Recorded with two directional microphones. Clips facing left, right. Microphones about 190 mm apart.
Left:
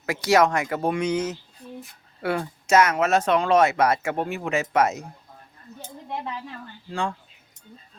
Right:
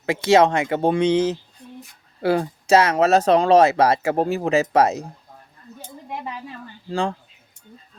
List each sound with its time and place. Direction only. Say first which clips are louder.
0.0 s speech: right 4 dB; 25° right (ahead or behind)
6.9 s speech: right 5 dB; 35° right (ahead or behind)